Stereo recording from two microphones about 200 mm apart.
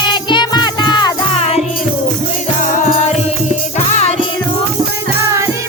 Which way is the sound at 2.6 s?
40° left (ahead or behind).